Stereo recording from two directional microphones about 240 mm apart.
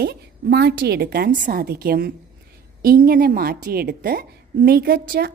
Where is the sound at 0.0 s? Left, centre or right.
Right.